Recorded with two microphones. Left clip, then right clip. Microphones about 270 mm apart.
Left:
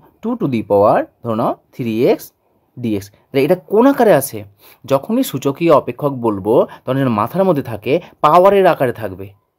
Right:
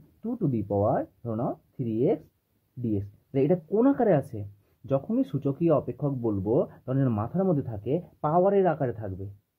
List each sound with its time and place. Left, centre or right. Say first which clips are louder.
0.2 s speech: left 11 dB; left